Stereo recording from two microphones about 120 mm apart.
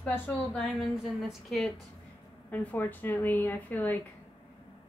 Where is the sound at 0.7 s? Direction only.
Centre (ahead or behind).